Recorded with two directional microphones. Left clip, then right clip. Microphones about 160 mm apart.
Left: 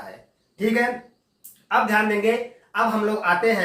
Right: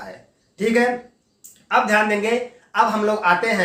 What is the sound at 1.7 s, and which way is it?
Speech, 30° right (ahead or behind).